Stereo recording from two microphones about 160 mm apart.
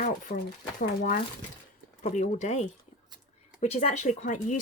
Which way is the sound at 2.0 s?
45° left (ahead or behind).